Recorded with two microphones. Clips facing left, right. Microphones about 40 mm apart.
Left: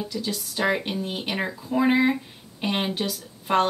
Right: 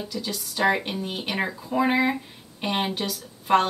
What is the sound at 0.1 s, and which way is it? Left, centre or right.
A woman's voice, centre.